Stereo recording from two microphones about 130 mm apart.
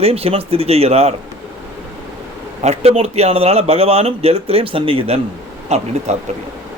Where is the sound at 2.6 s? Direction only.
55° right (ahead or behind).